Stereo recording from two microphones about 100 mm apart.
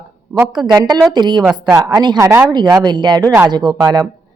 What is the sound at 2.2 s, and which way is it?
Speech, 25° right (ahead or behind).